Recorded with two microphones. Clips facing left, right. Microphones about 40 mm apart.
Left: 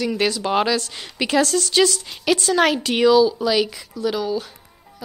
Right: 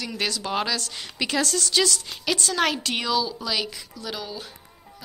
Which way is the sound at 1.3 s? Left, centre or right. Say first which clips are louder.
Left 7 dB; left.